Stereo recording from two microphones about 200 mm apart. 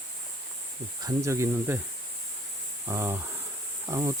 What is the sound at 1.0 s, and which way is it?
Speech, 15° right (ahead or behind).